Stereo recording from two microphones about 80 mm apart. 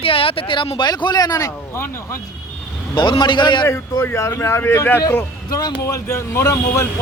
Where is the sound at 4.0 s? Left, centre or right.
Left.